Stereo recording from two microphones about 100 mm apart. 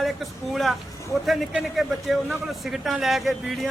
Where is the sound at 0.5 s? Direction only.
Centre (ahead or behind).